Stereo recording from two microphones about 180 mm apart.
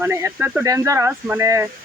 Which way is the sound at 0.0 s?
15° right (ahead or behind).